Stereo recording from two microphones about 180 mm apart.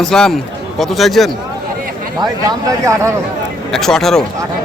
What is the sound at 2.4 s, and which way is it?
Speech, 20° right (ahead or behind).